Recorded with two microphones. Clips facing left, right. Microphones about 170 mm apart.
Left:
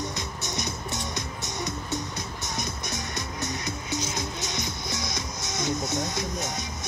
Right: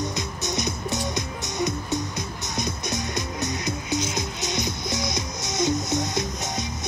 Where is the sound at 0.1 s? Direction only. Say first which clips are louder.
Right 5 dB; 15° right (ahead or behind).